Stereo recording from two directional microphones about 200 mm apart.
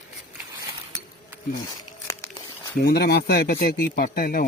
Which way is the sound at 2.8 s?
55° left (ahead or behind).